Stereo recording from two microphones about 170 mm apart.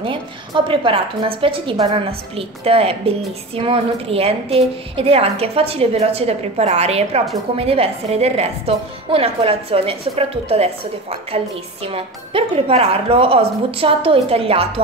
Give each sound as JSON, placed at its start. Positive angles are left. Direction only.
{"t": 0.0, "sound": "a woman's voice", "side_deg": -30}